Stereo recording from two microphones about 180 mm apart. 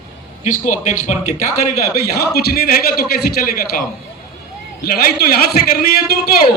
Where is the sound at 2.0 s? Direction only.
60° left (ahead or behind).